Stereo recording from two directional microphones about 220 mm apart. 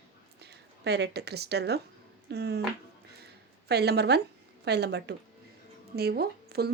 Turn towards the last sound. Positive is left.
turn(degrees=-45)  # may be behind; listen again after turning